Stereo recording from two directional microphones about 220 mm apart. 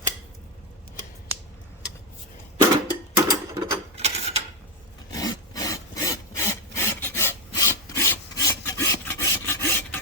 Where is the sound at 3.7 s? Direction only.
30° right (ahead or behind).